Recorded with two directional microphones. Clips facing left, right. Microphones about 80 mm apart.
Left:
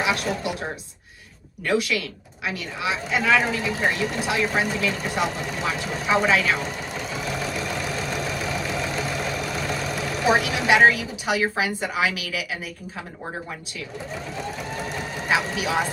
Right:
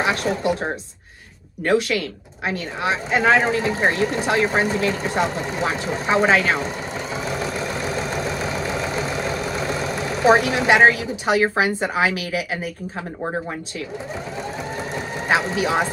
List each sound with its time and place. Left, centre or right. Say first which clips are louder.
0.0 s a woman's voice: right 4 dB; right
1.6 s a woman's voice: right 4 dB; right
10.2 s a woman's voice: right 5 dB; right
15.3 s a woman's voice: right 4 dB; right